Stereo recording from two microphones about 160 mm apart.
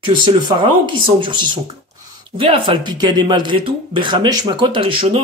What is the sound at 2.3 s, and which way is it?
Speech, 35° right (ahead or behind).